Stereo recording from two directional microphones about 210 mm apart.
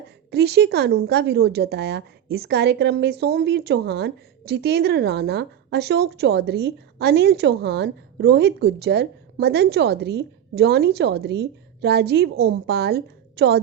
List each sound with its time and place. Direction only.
0.3 s a woman's voice: 50° right (ahead or behind)